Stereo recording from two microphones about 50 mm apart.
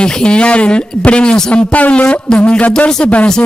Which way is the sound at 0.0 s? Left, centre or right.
Centre.